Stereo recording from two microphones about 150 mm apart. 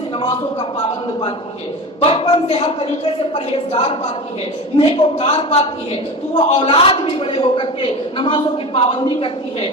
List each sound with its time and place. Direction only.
2.0 s a man's voice: 40° left (ahead or behind)